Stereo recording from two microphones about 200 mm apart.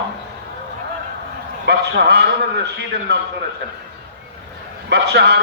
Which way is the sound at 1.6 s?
55° right (ahead or behind).